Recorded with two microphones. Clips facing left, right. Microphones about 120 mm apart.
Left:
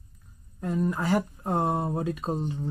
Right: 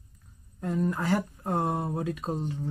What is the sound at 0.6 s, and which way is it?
Speech, 5° left (ahead or behind).